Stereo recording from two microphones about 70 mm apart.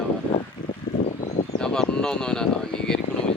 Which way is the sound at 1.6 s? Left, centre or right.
Centre.